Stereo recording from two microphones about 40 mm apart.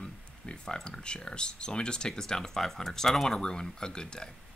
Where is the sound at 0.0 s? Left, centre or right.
Left.